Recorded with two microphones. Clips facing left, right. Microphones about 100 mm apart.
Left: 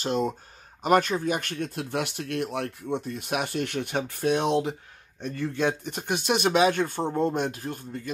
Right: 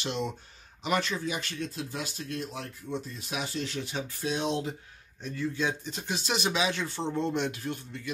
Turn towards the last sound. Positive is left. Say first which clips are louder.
# left 2 dB
turn(degrees=40)  # may be behind; listen again after turning